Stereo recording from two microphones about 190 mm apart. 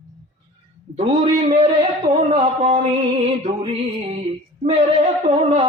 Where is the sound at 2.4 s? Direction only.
35° right (ahead or behind).